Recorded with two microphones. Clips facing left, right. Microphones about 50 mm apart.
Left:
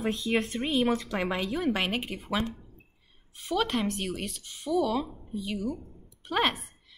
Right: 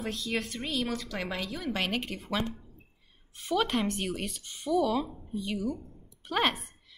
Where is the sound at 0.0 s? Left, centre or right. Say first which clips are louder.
Left 5 dB; centre.